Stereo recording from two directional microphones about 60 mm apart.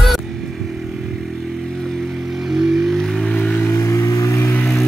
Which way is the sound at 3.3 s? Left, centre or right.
Left.